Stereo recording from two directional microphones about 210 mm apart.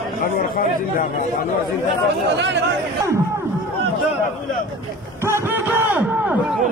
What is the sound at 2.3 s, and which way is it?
Speech, 55° right (ahead or behind).